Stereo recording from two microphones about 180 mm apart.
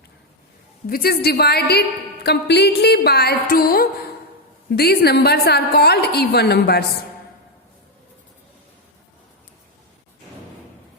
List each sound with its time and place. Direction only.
0.9 s a woman's voice: 55° left (ahead or behind)